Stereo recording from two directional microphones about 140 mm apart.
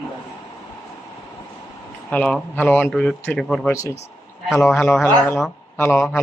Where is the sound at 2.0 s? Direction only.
10° left (ahead or behind).